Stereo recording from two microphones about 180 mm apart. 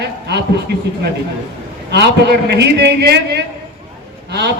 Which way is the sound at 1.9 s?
70° right (ahead or behind).